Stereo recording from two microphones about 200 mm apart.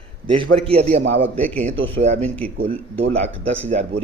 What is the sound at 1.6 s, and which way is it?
A man's voice, 35° right (ahead or behind).